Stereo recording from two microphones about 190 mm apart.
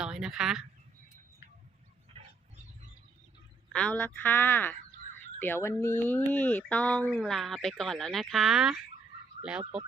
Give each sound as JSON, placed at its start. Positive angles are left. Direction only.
{"t": 0.0, "sound": "speech", "side_deg": -5}
{"t": 2.1, "sound": "a sound", "side_deg": -30}
{"t": 3.7, "sound": "speech", "side_deg": 5}